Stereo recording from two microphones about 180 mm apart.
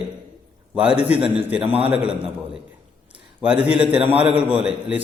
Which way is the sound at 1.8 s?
35° right (ahead or behind).